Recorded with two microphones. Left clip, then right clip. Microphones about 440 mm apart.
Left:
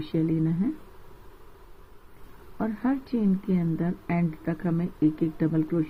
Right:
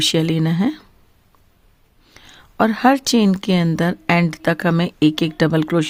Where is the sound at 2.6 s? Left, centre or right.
Right.